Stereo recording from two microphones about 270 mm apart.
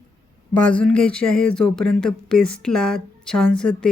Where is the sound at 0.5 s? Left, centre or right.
Centre.